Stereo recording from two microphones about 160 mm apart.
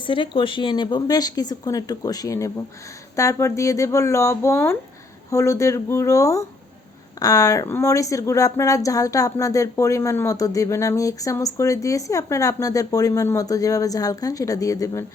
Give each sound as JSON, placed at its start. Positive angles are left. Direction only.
{"t": 0.0, "sound": "speech", "side_deg": 30}